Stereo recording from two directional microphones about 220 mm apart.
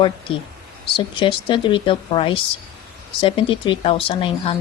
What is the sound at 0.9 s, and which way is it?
Speech, 20° left (ahead or behind).